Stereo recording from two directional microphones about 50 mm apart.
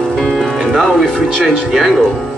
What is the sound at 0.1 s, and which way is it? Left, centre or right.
Music, centre.